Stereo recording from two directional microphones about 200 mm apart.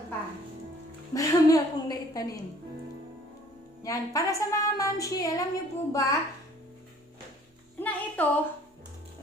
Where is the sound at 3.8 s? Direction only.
15° left (ahead or behind).